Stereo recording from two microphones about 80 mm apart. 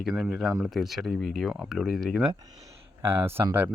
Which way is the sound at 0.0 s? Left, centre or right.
Centre.